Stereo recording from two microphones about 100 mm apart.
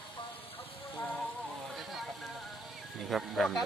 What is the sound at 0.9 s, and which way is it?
Music, 10° left (ahead or behind).